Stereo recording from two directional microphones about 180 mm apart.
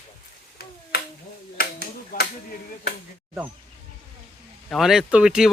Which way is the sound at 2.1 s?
50° left (ahead or behind).